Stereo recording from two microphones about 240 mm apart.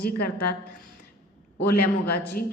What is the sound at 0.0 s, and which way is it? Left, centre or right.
Speech, left.